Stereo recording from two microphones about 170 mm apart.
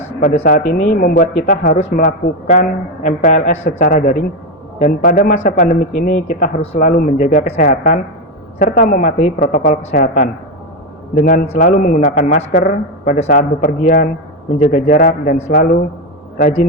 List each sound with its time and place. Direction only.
0.2 s a man's voice: 45° left (ahead or behind)